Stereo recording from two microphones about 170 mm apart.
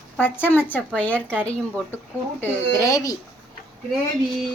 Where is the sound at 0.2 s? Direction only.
10° left (ahead or behind).